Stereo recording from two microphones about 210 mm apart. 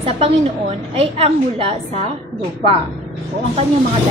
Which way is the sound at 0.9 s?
30° right (ahead or behind).